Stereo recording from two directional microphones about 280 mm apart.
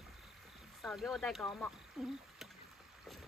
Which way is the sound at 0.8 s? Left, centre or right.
Centre.